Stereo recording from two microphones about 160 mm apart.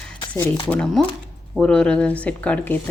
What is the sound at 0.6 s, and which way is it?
Speech, 5° left (ahead or behind).